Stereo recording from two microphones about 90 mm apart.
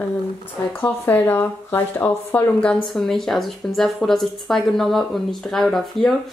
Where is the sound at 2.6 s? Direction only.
10° left (ahead or behind).